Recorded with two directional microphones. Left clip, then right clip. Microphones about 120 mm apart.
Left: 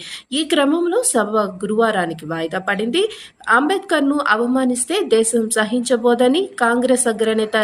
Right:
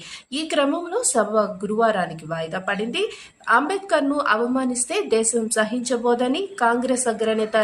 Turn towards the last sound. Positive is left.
turn(degrees=20)  # may be behind; listen again after turning